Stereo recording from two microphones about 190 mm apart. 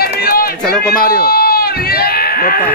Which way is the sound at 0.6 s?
5° left (ahead or behind).